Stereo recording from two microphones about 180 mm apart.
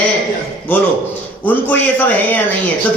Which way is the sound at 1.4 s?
10° left (ahead or behind).